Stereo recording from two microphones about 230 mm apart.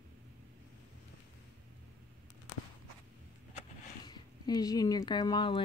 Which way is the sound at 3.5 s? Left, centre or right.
Centre.